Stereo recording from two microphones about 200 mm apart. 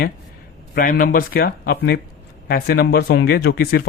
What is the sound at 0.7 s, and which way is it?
Speech, 40° left (ahead or behind).